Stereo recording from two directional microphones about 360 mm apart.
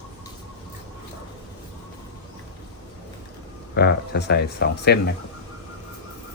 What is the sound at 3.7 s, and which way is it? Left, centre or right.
Speech, left.